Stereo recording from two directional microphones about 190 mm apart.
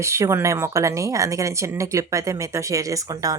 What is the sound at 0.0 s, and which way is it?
A woman's voice, 15° right (ahead or behind).